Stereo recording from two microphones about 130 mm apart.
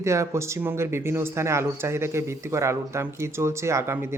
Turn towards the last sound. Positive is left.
turn(degrees=-20)  # may be behind; listen again after turning